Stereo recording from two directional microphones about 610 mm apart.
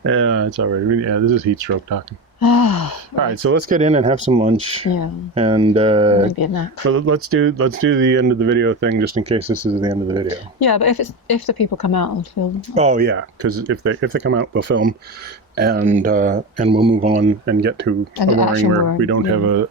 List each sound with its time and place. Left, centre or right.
0.0 s a sound: centre
2.4 s gasp: left
3.4 s speech: centre
4.9 s speech: left
5.3 s speech: centre
6.2 s speech: left
6.8 s speech: centre
10.6 s speech: left
12.7 s speech: centre
18.2 s speech: left
19.0 s speech: right